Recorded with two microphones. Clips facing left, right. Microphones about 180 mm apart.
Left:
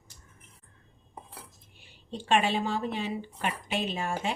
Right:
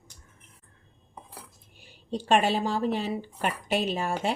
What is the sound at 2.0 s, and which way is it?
A woman's voice, 40° right (ahead or behind).